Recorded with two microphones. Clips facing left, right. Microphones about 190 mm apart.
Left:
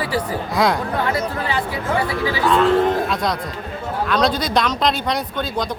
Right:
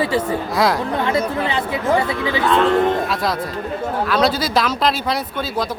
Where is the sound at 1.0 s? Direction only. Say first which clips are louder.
Right 3 dB; 25° right (ahead or behind).